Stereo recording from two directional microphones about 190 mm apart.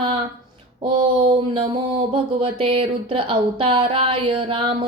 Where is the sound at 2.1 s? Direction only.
30° right (ahead or behind).